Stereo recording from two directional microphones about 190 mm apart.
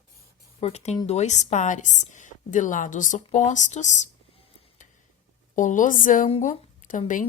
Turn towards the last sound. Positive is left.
turn(degrees=40)  # may be behind; listen again after turning